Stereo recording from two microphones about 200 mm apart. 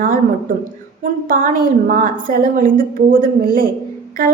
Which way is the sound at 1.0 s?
40° right (ahead or behind).